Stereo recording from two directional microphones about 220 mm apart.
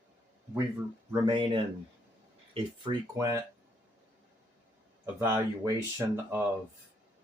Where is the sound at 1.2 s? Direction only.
20° right (ahead or behind).